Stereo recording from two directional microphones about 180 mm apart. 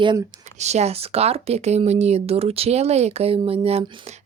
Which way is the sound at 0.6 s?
40° right (ahead or behind).